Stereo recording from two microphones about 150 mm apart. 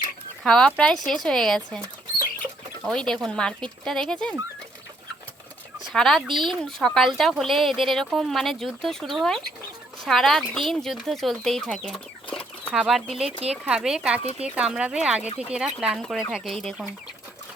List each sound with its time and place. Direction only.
0.4 s speech: 5° left (ahead or behind)
2.8 s speech: 5° left (ahead or behind)
5.9 s speech: centre (ahead or behind)
6.2 s speech: 30° right (ahead or behind)
6.7 s speech: 5° left (ahead or behind)